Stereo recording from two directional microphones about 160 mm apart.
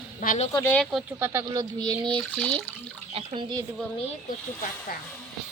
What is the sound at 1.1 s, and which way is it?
Speech, 15° right (ahead or behind).